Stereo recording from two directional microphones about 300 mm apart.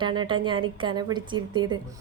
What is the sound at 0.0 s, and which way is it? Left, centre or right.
A woman's voice, centre.